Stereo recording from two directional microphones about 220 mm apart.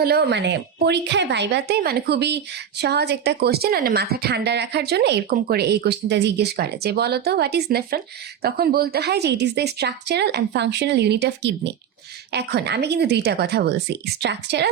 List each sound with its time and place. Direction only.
0.0 s a woman's voice: 45° right (ahead or behind)